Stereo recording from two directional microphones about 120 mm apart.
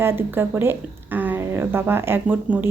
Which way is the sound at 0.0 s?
20° right (ahead or behind).